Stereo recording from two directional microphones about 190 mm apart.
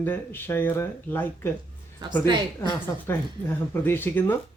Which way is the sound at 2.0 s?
25° right (ahead or behind).